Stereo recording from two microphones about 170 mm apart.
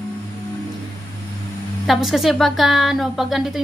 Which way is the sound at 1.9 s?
Centre (ahead or behind).